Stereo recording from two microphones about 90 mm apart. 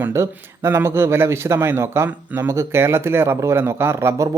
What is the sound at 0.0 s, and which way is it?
Speech, 30° right (ahead or behind).